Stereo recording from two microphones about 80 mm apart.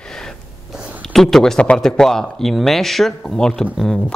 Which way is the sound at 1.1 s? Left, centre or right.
Centre.